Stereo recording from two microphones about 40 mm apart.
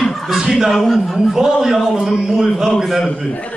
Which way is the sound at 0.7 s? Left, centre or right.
Centre.